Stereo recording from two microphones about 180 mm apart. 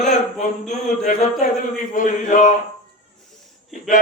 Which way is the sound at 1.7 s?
45° left (ahead or behind).